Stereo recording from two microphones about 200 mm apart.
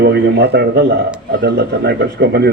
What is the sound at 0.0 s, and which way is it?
A man's voice, 60° right (ahead or behind).